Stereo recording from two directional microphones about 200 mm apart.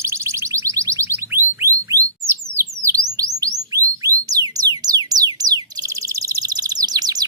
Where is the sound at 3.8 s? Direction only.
15° right (ahead or behind).